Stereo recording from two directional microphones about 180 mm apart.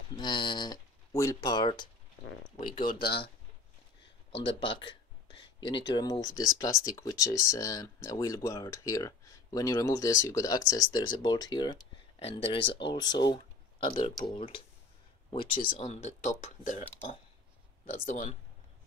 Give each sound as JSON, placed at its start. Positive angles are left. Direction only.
{"t": 0.1, "sound": "speech", "side_deg": 25}
{"t": 2.8, "sound": "speech", "side_deg": 55}
{"t": 4.4, "sound": "speech", "side_deg": 30}